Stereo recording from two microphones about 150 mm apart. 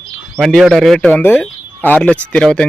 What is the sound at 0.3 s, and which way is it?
Speech, centre (ahead or behind).